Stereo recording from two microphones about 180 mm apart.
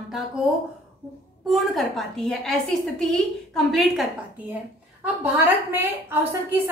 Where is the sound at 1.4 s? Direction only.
Centre (ahead or behind).